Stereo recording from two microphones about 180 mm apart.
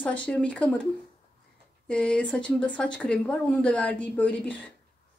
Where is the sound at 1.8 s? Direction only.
5° left (ahead or behind).